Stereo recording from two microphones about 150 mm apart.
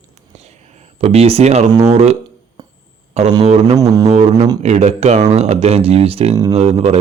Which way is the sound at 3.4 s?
45° right (ahead or behind).